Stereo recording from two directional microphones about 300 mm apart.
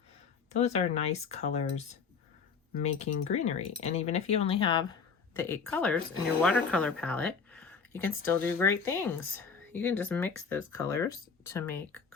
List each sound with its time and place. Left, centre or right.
0.6 s speech: left